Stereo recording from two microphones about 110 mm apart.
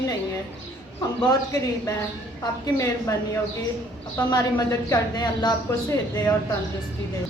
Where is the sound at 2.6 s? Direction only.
30° left (ahead or behind).